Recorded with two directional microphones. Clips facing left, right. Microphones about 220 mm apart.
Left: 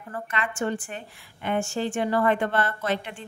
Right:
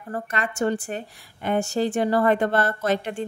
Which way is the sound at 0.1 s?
40° right (ahead or behind).